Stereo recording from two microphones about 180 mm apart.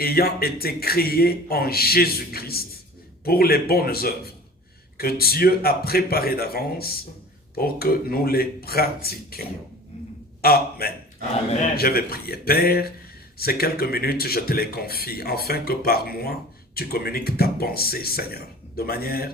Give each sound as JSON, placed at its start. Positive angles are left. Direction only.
{"t": 0.0, "sound": "a man's voice", "side_deg": 55}